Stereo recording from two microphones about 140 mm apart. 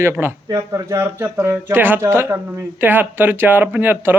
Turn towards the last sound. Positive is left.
turn(degrees=-15)  # may be behind; listen again after turning